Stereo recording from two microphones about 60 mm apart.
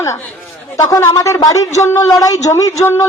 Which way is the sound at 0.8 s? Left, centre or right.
Left.